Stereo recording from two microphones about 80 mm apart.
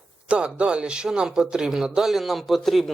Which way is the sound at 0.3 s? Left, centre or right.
Centre.